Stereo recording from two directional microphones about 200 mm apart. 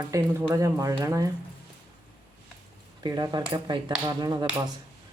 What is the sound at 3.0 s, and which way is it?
Speech, 20° right (ahead or behind).